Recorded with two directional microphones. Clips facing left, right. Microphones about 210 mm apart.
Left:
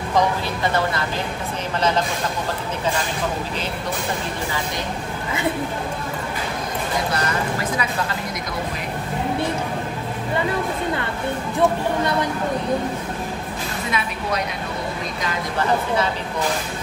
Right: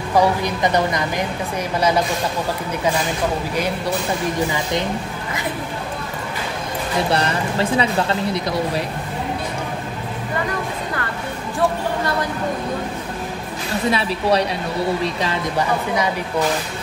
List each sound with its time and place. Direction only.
0.1 s a woman's voice: 15° right (ahead or behind)
7.1 s speech: 30° right (ahead or behind)
13.8 s speech: 30° right (ahead or behind)